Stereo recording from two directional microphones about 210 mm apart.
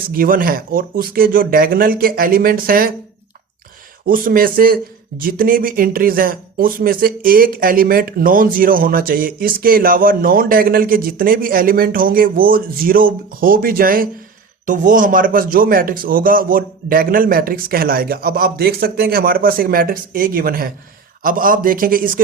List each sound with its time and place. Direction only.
0.0 s speech: 45° right (ahead or behind)
4.0 s speech: 45° right (ahead or behind)